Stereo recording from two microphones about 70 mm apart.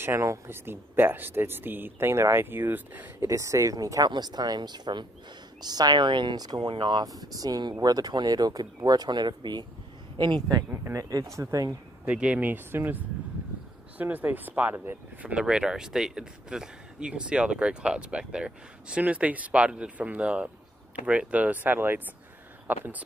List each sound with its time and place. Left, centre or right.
0.0 s speech: right
3.3 s speech: right
4.1 s speech: right
5.6 s speech: right
10.9 s speech: right
12.0 s speech: centre
15.4 s speech: centre